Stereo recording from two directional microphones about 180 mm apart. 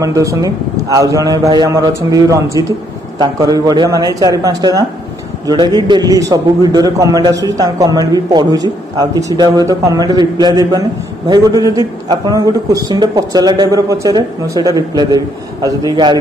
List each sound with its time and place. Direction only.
0.0 s a man's voice: 20° right (ahead or behind)